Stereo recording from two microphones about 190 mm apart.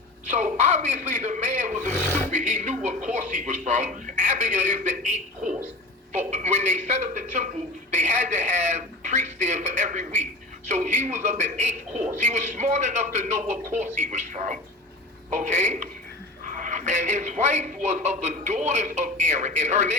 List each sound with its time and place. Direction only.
0.3 s a man's voice: 40° right (ahead or behind)
6.1 s a man's voice: 35° right (ahead or behind)